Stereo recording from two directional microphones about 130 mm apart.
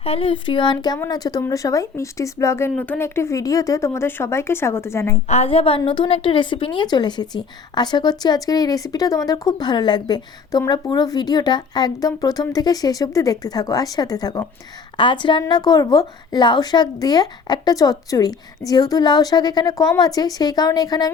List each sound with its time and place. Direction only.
0.0 s a woman's voice: 45° left (ahead or behind); by 5.2 s 20° left (ahead or behind)
5.3 s a woman's voice: 50° left (ahead or behind); by 21.1 s 30° left (ahead or behind)